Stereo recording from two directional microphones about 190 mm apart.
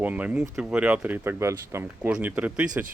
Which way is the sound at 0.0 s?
10° right (ahead or behind).